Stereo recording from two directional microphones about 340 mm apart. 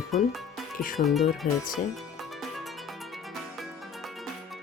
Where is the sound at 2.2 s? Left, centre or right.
Centre.